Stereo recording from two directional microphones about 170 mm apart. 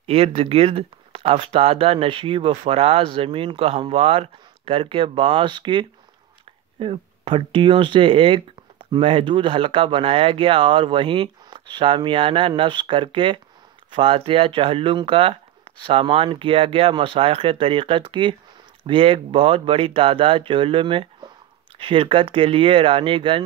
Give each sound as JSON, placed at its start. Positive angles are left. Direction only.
{"t": 0.0, "sound": "speech", "side_deg": -35}